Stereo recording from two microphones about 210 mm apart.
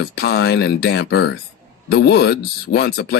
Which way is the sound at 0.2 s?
50° left (ahead or behind).